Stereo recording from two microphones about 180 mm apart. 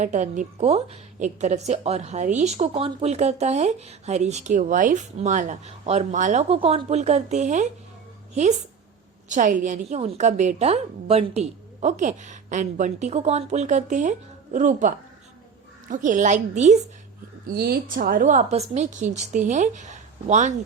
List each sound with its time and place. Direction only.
0.0 s a woman's voice: 45° right (ahead or behind)
9.3 s a woman's voice: 45° right (ahead or behind)
17.4 s a woman's voice: 60° right (ahead or behind); by 20.5 s 40° right (ahead or behind)